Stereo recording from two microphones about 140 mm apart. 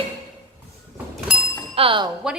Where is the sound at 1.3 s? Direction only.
5° right (ahead or behind).